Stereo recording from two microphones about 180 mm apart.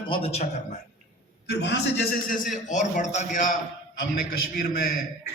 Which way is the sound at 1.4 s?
70° left (ahead or behind).